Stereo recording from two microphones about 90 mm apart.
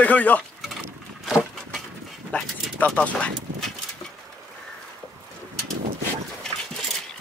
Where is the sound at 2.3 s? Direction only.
15° left (ahead or behind).